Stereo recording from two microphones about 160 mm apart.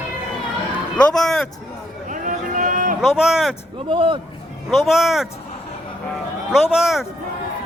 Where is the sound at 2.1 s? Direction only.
55° right (ahead or behind).